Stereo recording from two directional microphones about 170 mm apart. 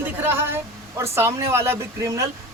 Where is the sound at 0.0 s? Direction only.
15° right (ahead or behind).